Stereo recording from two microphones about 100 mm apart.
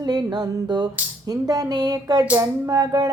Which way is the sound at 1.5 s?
40° right (ahead or behind).